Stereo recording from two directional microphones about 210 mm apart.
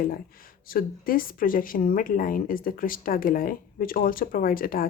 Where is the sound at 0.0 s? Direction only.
45° left (ahead or behind).